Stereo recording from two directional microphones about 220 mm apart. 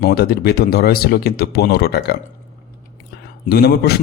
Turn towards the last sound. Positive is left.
turn(degrees=45)  # may be behind; listen again after turning